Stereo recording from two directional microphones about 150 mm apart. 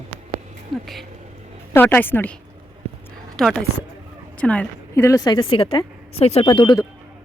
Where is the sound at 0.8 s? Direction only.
Centre (ahead or behind).